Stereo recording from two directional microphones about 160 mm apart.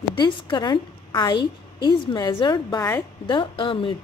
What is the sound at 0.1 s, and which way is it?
A woman's voice, 30° left (ahead or behind).